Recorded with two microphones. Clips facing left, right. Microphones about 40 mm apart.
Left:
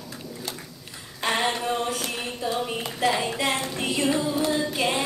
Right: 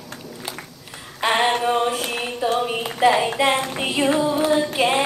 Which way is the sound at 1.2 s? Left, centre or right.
Right.